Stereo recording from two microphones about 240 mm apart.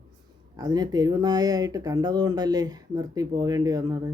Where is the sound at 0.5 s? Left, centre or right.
Centre.